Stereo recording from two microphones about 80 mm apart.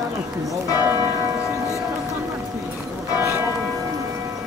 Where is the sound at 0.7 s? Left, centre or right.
Right.